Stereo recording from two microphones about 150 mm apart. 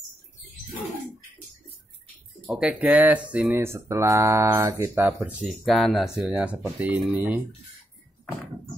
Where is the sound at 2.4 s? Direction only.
5° right (ahead or behind).